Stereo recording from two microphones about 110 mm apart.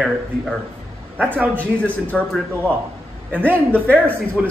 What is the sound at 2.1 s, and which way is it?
Speech, 5° left (ahead or behind).